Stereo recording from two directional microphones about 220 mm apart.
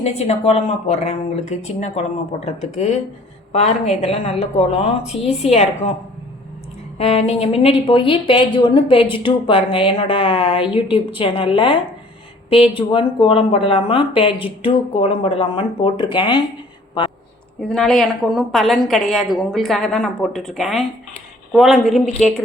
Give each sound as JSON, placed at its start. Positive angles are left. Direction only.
{"t": 0.0, "sound": "a woman's voice", "side_deg": 30}
{"t": 7.0, "sound": "a woman's voice", "side_deg": 30}
{"t": 17.0, "sound": "a sound", "side_deg": 20}
{"t": 17.6, "sound": "a woman's voice", "side_deg": 0}